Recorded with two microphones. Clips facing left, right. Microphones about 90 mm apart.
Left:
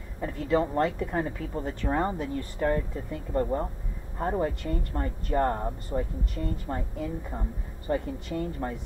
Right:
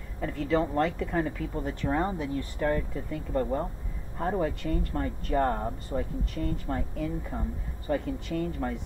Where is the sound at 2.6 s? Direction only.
25° left (ahead or behind).